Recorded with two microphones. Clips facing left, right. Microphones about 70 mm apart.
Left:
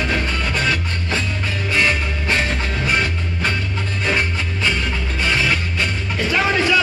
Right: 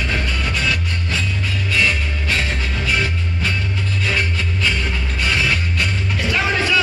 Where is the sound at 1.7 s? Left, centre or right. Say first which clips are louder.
Left 1 dB; left.